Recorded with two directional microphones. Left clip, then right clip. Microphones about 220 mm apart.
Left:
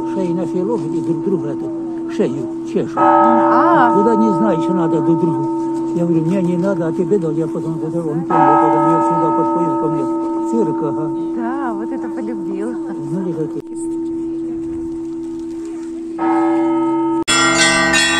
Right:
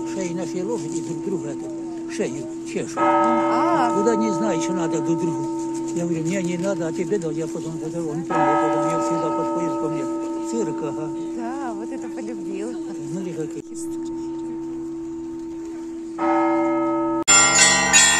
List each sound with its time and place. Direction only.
0.2 s speech: 25° left (ahead or behind)
2.1 s speech: 25° left (ahead or behind)
3.0 s church bell: 35° right (ahead or behind)
3.4 s speech: 5° left (ahead or behind)
4.1 s speech: 30° left (ahead or behind)
8.3 s church bell: 35° right (ahead or behind)
16.2 s church bell: 10° left (ahead or behind)
17.3 s bell: 35° right (ahead or behind)